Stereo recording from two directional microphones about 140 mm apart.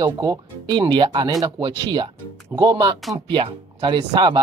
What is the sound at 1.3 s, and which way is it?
Speech, 25° right (ahead or behind).